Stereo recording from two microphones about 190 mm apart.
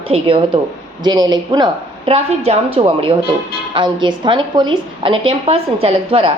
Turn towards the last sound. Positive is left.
turn(degrees=-30)  # may be behind; listen again after turning